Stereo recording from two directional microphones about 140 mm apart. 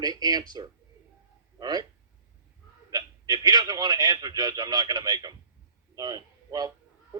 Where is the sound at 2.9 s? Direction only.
30° right (ahead or behind).